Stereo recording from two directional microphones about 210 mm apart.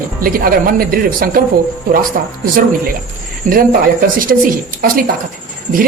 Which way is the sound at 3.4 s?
40° right (ahead or behind).